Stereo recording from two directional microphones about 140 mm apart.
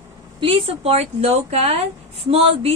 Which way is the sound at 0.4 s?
40° right (ahead or behind).